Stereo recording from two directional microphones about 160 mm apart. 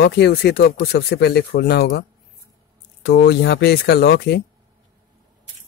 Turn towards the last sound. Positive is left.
turn(degrees=90)